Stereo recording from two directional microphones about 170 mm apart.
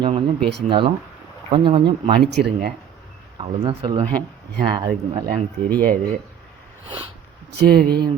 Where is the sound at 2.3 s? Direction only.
70° right (ahead or behind).